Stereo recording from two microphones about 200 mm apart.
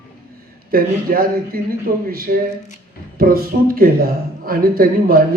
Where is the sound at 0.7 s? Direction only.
45° right (ahead or behind).